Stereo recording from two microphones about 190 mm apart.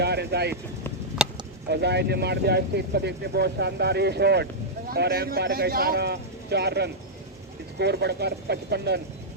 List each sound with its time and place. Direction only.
0.0 s speech: 60° right (ahead or behind)
1.7 s speech: 60° right (ahead or behind)